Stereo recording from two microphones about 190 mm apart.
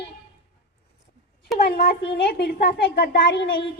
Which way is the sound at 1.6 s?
50° left (ahead or behind).